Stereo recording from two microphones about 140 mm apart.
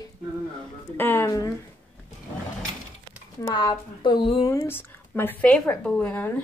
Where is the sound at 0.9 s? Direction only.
15° left (ahead or behind).